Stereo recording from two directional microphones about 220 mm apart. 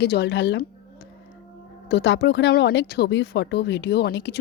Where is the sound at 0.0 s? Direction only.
50° left (ahead or behind).